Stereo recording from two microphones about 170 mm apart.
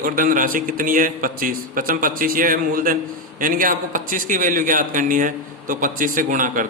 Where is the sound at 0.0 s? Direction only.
55° right (ahead or behind).